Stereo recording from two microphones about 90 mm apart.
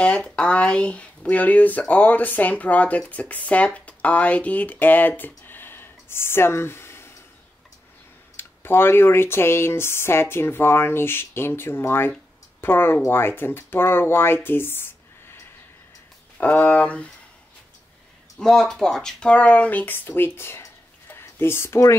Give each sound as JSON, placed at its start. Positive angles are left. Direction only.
{"t": 0.0, "sound": "speech", "side_deg": 10}
{"t": 8.4, "sound": "speech", "side_deg": 25}
{"t": 16.3, "sound": "speech", "side_deg": 15}
{"t": 18.4, "sound": "speech", "side_deg": 5}
{"t": 21.1, "sound": "a sound", "side_deg": 25}